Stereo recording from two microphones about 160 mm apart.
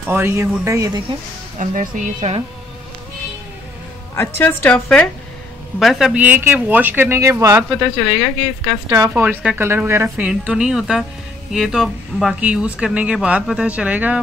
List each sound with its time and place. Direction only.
0.0 s speech: 15° right (ahead or behind)
1.6 s speech: 55° right (ahead or behind)
4.1 s a woman's voice: 15° left (ahead or behind); by 14.2 s 10° right (ahead or behind)